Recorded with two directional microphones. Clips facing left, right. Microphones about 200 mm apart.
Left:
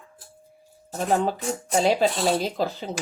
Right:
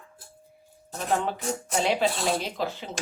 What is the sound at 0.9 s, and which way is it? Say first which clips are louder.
Speech: left 4 dB; 35° left (ahead or behind).